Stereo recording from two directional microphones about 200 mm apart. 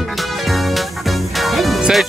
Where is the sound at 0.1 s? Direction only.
Centre (ahead or behind).